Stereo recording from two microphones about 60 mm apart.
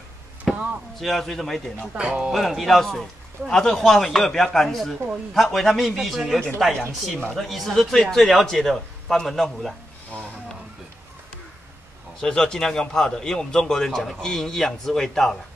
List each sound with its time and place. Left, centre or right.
0.5 s a sound: centre
0.9 s a man's voice: centre
2.0 s speech: centre
2.3 s a man's voice: centre
10.1 s a sound: left
12.2 s a man's voice: centre